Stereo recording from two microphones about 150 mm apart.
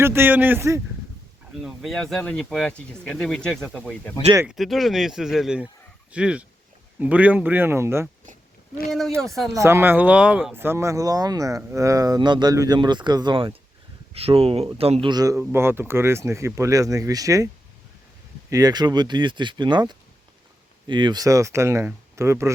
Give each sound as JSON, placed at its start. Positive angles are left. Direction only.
{"t": 0.0, "sound": "speech", "side_deg": -15}
{"t": 1.6, "sound": "speech", "side_deg": 0}
{"t": 8.9, "sound": "speech", "side_deg": 0}
{"t": 9.6, "sound": "speech", "side_deg": -15}
{"t": 15.1, "sound": "speech", "side_deg": -25}
{"t": 18.5, "sound": "speech", "side_deg": -25}